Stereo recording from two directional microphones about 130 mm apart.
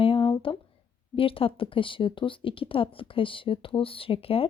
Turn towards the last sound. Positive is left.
turn(degrees=45)  # may be behind; listen again after turning